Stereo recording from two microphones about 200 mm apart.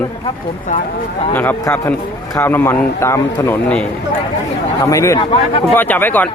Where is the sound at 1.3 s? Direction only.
10° left (ahead or behind).